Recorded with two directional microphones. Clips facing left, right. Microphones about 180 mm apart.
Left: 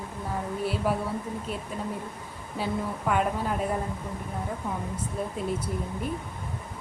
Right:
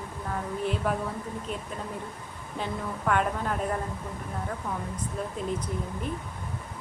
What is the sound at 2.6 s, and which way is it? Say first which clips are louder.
Female singing: left 2 dB; 10° left (ahead or behind).